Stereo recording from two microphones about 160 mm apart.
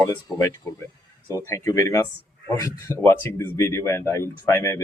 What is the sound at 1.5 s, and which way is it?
Speech, 20° left (ahead or behind).